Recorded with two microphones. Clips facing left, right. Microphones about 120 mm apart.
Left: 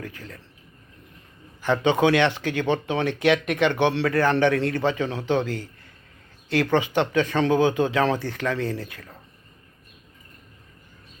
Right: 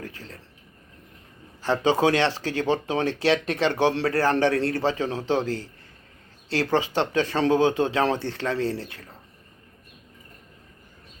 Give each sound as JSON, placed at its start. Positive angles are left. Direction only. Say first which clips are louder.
{"t": 0.0, "sound": "speech", "louder": "left 1 dB", "side_deg": -30}
{"t": 1.6, "sound": "speech", "louder": "left 1 dB", "side_deg": -30}